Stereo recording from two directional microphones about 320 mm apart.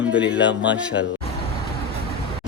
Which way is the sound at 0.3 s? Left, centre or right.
Left.